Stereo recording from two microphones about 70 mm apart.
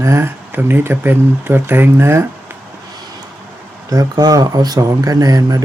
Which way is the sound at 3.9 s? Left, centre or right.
Right.